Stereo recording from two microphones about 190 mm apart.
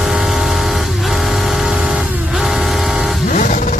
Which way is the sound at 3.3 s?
40° left (ahead or behind).